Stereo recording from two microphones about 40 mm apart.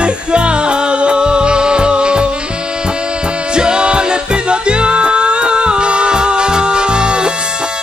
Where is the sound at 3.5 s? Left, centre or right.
Right.